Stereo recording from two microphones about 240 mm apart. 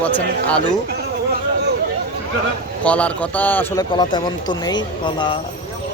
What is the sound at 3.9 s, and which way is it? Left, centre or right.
Speech, centre.